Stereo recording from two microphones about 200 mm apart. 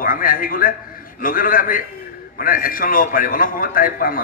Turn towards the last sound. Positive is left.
turn(degrees=45)  # may be behind; listen again after turning